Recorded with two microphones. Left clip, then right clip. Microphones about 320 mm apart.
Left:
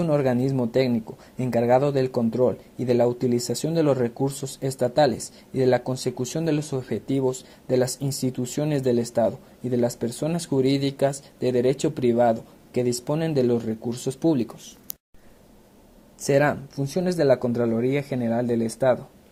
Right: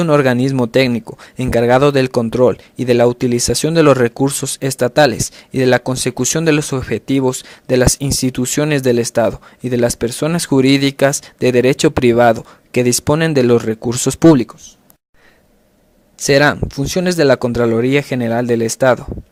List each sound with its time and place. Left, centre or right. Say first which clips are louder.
0.0 s speech: right 10 dB; right
16.1 s speech: right 9 dB; right